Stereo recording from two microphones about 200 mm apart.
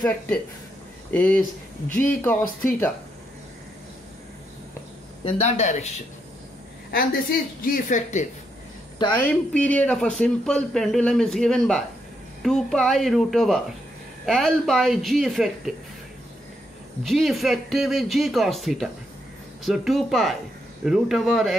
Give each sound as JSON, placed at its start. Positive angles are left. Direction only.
{"t": 1.1, "sound": "speech", "side_deg": 5}
{"t": 1.9, "sound": "a woman's voice", "side_deg": 40}
{"t": 2.2, "sound": "speech", "side_deg": 10}
{"t": 5.2, "sound": "speech", "side_deg": 35}
{"t": 6.9, "sound": "a woman's voice", "side_deg": 50}
{"t": 9.1, "sound": "speech", "side_deg": 10}
{"t": 17.0, "sound": "speech", "side_deg": 0}